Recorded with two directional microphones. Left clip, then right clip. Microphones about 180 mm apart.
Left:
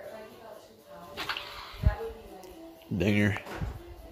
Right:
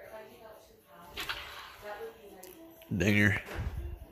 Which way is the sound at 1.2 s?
45° left (ahead or behind).